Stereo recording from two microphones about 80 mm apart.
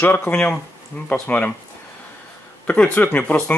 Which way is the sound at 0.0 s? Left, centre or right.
Left.